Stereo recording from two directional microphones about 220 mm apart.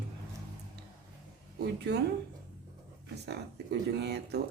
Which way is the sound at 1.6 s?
50° right (ahead or behind).